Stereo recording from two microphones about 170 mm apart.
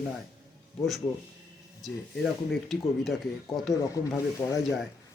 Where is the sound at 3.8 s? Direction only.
20° left (ahead or behind).